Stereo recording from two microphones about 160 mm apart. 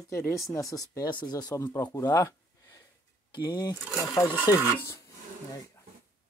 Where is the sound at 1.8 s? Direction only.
20° left (ahead or behind).